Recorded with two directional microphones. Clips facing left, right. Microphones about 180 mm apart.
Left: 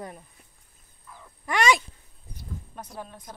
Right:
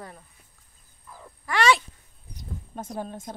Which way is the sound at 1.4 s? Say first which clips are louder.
Right 1 dB; 15° left (ahead or behind).